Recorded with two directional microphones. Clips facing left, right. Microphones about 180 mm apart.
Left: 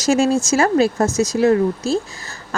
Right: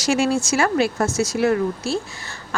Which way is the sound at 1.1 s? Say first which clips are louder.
Left 3 dB; 20° left (ahead or behind).